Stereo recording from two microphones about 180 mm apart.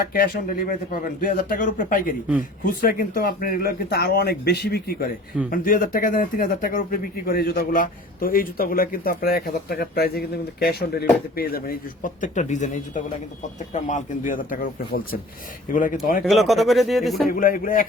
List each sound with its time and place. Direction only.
0.1 s speech: 55° left (ahead or behind)
16.2 s speech: centre (ahead or behind)
17.2 s speech: 50° left (ahead or behind)